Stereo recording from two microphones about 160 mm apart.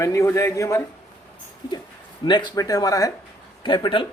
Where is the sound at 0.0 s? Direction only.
20° left (ahead or behind).